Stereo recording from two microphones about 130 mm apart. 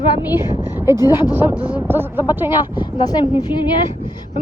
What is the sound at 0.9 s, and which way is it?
Speech, 30° left (ahead or behind).